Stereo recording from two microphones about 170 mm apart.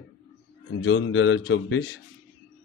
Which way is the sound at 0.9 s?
90° left.